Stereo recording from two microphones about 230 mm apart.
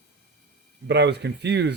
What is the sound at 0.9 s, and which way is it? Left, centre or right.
Speech, right.